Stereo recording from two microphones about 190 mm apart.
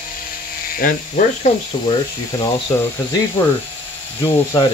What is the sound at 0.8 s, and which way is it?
Speech, 45° left (ahead or behind).